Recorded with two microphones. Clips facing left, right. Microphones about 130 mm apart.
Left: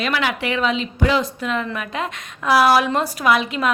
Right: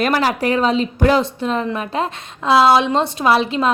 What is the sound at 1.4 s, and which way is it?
A woman's voice, 35° right (ahead or behind).